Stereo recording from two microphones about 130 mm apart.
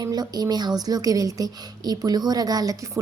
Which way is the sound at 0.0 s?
30° right (ahead or behind).